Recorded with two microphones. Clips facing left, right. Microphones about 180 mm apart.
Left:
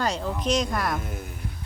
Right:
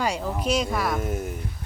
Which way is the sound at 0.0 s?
10° right (ahead or behind).